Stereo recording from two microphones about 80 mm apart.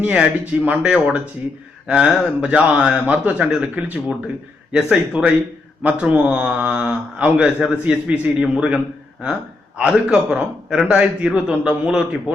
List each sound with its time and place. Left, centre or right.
0.0 s speech: centre